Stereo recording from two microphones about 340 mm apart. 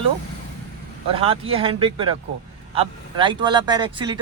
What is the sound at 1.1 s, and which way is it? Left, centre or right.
Speech, centre.